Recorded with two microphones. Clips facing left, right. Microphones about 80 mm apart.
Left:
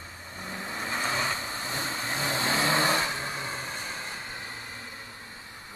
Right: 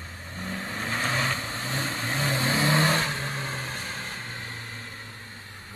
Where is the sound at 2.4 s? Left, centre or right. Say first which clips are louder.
Right 1 dB; left.